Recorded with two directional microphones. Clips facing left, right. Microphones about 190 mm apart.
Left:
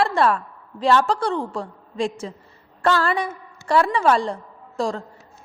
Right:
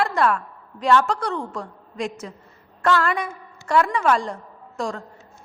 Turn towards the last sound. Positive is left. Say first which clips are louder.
# left 3 dB
turn(degrees=30)  # may be behind; listen again after turning